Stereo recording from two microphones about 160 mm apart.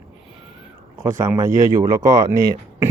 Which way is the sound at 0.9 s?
20° right (ahead or behind).